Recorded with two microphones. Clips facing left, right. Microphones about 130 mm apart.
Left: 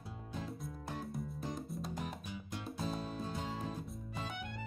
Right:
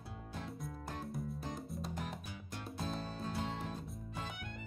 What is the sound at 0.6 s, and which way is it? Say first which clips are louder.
Music: left 1 dB; centre (ahead or behind).